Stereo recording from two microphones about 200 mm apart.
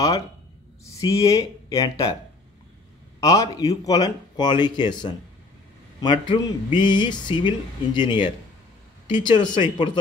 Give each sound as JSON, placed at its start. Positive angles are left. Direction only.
{"t": 0.9, "sound": "speech", "side_deg": 15}
{"t": 3.2, "sound": "speech", "side_deg": 15}
{"t": 6.2, "sound": "speech", "side_deg": 25}